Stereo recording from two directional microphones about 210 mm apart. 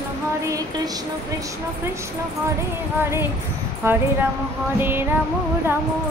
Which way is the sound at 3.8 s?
10° right (ahead or behind).